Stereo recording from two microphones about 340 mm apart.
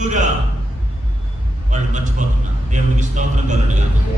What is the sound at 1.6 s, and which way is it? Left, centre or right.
A man's voice, right.